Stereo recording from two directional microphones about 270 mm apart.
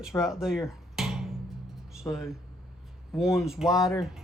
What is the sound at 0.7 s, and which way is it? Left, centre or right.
Music, centre.